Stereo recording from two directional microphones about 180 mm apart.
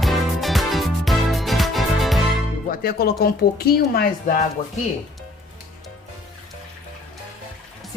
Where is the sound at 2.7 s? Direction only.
55° left (ahead or behind).